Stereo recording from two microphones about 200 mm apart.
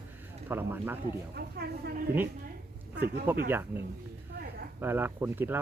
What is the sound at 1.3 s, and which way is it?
Speech, 55° right (ahead or behind).